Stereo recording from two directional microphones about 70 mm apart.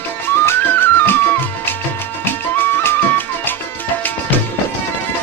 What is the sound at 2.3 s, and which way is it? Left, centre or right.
Music, left.